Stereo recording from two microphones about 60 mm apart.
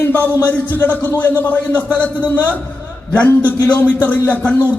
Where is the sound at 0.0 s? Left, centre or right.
Left.